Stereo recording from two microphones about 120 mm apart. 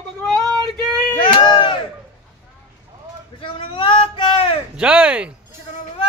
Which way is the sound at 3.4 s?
45° left (ahead or behind).